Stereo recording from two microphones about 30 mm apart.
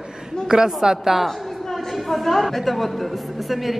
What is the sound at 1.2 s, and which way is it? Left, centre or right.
A man's voice, centre.